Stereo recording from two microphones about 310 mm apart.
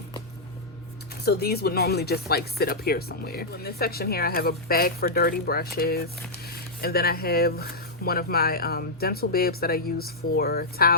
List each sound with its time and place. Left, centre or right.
1.2 s speech: left